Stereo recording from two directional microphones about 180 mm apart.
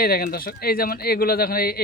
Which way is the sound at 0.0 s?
55° left (ahead or behind).